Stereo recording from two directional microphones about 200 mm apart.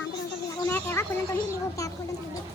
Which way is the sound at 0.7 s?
10° left (ahead or behind).